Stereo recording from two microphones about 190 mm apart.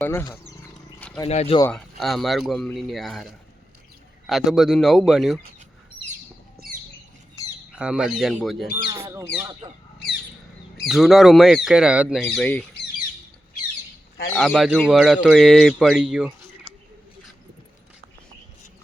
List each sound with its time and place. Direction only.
0.0 s speech: 15° left (ahead or behind)
0.9 s wild animals: 10° left (ahead or behind)
1.3 s speech: 35° left (ahead or behind)
1.7 s speech: centre (ahead or behind)
7.8 s speech: 5° right (ahead or behind)
8.9 s speech: 15° right (ahead or behind)
10.8 s speech: centre (ahead or behind)
14.3 s speech: centre (ahead or behind)